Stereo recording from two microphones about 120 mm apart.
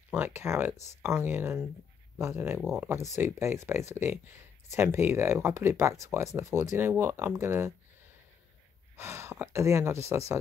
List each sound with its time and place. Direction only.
0.1 s speech: 20° right (ahead or behind)
8.9 s speech: 20° right (ahead or behind)